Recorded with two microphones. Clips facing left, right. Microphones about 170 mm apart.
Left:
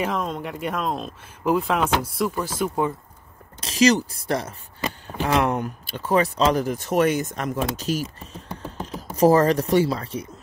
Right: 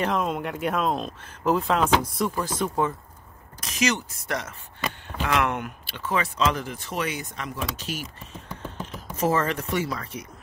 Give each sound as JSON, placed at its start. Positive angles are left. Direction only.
{"t": 0.0, "sound": "speech", "side_deg": 0}
{"t": 3.6, "sound": "speech", "side_deg": 35}